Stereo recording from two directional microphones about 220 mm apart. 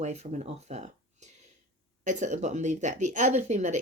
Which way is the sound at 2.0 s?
35° right (ahead or behind).